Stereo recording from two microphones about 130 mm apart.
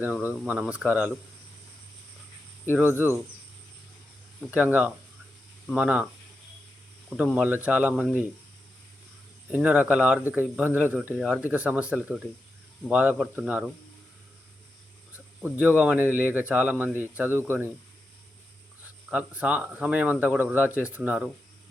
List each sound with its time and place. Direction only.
0.0 s speech: 15° right (ahead or behind)
2.7 s speech: 15° right (ahead or behind)
4.5 s speech: 15° right (ahead or behind)
7.3 s speech: 10° right (ahead or behind)
9.5 s speech: 10° right (ahead or behind)
15.4 s speech: 15° right (ahead or behind)
19.1 s speech: 10° right (ahead or behind)